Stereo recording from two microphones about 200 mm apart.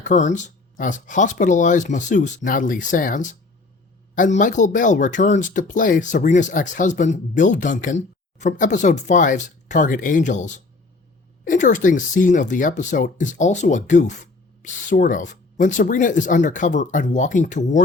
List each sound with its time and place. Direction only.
0.0 s speech: 40° left (ahead or behind)